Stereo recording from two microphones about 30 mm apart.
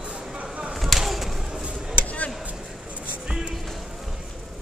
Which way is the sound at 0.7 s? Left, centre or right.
Centre.